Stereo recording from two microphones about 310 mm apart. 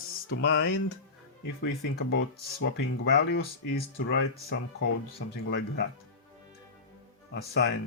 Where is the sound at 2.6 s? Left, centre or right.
Left.